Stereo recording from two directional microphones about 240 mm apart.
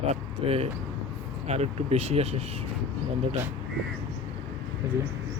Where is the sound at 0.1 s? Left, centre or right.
Right.